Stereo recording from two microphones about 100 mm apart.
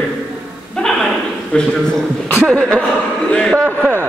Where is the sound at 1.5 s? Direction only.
5° left (ahead or behind).